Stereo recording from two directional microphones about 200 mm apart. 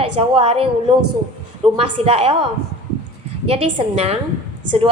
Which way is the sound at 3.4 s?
30° right (ahead or behind).